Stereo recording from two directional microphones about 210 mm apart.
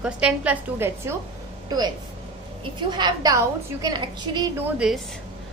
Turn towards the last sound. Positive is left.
turn(degrees=-5)  # may be behind; listen again after turning